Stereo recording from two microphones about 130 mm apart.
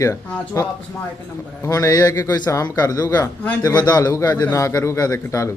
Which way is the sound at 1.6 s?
25° left (ahead or behind).